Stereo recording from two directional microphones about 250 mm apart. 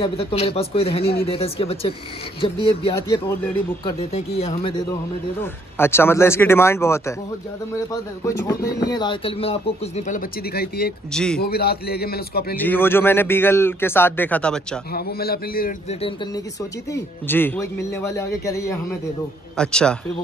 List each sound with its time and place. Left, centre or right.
0.0 s speech: left
5.4 s a man's voice: centre; by 10.9 s left
11.1 s a man's voice: centre
11.4 s a man's voice: left
12.5 s a man's voice: centre
14.9 s a man's voice: left
16.9 s a man's voice: centre